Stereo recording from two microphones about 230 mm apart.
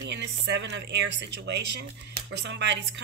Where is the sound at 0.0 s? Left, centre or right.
Right.